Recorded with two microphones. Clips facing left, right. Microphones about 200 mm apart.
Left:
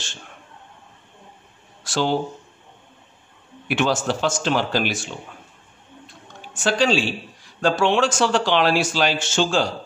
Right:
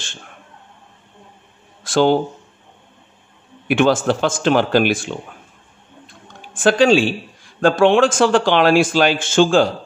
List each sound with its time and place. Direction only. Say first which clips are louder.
1.8 s a sound: right 8 dB; 55° right (ahead or behind)
3.6 s a man's voice: right 6 dB; 55° right (ahead or behind)
6.5 s a man's voice: right 7 dB; 50° right (ahead or behind)